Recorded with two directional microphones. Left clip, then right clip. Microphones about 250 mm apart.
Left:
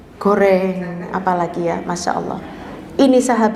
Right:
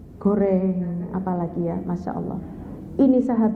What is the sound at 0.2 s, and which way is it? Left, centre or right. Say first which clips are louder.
A woman's voice: left 8 dB; centre.